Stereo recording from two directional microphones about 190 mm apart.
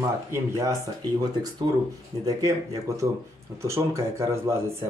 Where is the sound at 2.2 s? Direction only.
20° right (ahead or behind).